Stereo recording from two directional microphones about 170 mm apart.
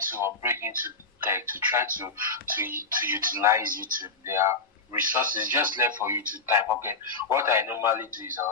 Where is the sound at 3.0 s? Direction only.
15° right (ahead or behind).